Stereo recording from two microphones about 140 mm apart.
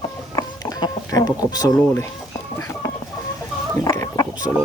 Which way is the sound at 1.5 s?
25° left (ahead or behind).